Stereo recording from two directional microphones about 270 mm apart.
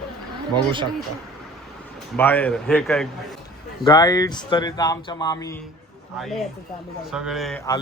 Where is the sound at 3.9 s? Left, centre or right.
Centre.